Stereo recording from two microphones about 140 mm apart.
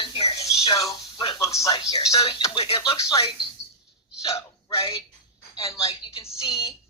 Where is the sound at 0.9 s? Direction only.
35° left (ahead or behind).